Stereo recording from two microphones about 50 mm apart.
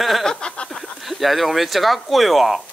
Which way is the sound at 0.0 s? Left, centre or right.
Centre.